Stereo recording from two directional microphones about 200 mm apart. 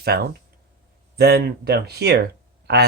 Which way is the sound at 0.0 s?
50° right (ahead or behind).